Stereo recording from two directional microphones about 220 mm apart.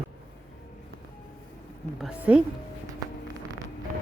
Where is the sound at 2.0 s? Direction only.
5° right (ahead or behind).